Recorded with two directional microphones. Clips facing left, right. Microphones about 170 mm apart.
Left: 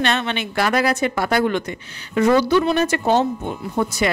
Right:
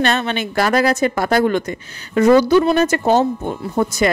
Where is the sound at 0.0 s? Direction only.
40° right (ahead or behind).